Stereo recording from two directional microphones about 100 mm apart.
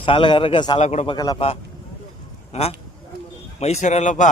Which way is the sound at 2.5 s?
85° left.